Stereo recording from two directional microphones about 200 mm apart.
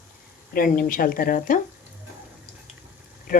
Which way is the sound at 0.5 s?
45° left (ahead or behind).